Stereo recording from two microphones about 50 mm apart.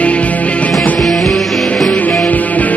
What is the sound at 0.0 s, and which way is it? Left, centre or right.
Music, left.